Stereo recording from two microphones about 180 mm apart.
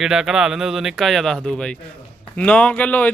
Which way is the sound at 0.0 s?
Centre (ahead or behind).